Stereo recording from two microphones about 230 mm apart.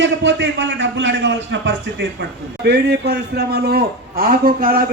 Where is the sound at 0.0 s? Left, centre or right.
Right.